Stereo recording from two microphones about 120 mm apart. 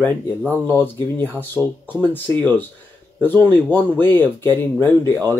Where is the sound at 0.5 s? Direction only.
15° left (ahead or behind).